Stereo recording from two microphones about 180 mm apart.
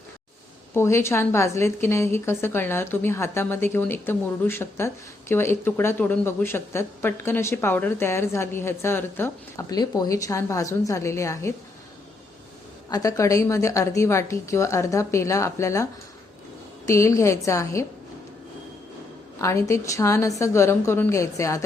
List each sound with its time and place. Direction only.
0.7 s speech: 15° left (ahead or behind)
12.9 s speech: 20° left (ahead or behind)
19.4 s speech: 15° left (ahead or behind)